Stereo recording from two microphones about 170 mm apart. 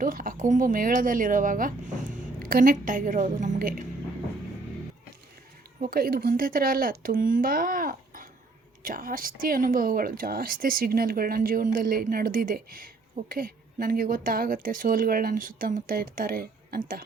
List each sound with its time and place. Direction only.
0.0 s speech: 55° right (ahead or behind)
5.8 s speech: 60° right (ahead or behind)